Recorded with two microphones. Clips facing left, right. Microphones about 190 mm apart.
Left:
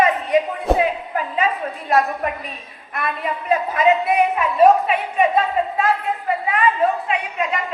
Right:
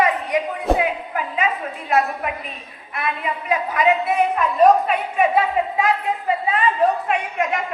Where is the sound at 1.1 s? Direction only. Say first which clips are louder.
Left 2 dB; 35° left (ahead or behind).